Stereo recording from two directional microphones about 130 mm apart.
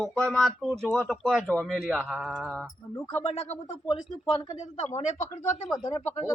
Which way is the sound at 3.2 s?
55° left (ahead or behind).